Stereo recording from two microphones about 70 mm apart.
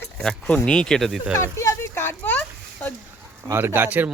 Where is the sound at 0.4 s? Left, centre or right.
Centre.